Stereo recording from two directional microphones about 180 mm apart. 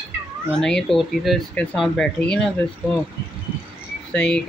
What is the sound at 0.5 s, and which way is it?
Speech, 5° left (ahead or behind).